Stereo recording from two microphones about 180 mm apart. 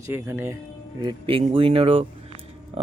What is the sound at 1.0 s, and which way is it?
Speech, 30° right (ahead or behind).